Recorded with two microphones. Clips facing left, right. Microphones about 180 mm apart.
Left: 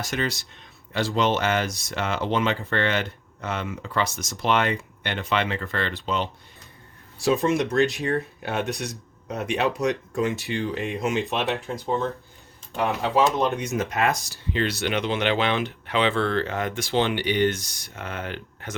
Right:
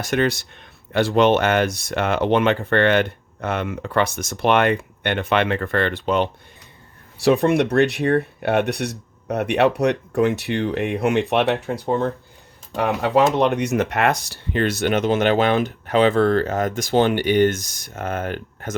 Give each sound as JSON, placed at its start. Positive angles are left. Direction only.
{"t": 0.1, "sound": "speech", "side_deg": -60}
{"t": 13.3, "sound": "speech", "side_deg": -70}